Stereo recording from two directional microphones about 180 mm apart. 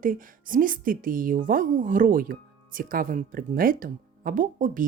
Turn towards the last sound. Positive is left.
turn(degrees=-45)  # may be behind; listen again after turning